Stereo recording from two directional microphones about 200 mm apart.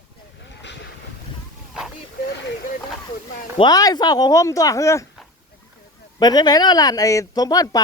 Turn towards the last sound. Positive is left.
turn(degrees=20)  # may be behind; listen again after turning